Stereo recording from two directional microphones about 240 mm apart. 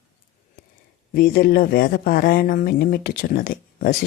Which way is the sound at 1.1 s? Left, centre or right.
Left.